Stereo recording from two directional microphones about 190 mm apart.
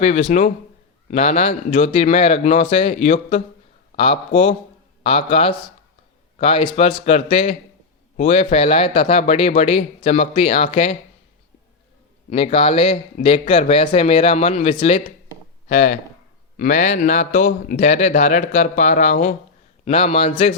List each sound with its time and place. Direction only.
0.0 s a man's voice: 35° left (ahead or behind)
12.3 s a man's voice: 30° left (ahead or behind)
19.8 s a man's voice: 35° left (ahead or behind)